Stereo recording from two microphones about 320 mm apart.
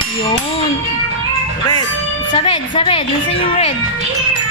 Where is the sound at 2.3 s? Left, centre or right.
Centre.